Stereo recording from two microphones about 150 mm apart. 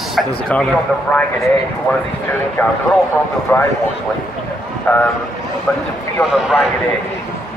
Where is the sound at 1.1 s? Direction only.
5° left (ahead or behind).